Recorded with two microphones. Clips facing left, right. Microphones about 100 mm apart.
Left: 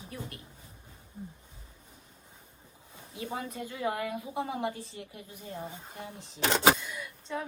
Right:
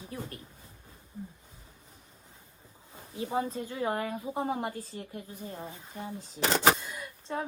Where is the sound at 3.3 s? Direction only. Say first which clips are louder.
Right 7 dB; 30° right (ahead or behind).